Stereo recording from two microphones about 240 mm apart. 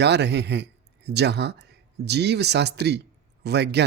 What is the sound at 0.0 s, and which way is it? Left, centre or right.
A man's voice, right.